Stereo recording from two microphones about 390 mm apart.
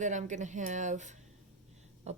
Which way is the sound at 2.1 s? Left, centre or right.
Centre.